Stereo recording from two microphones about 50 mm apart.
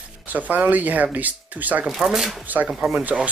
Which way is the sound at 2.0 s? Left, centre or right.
Centre.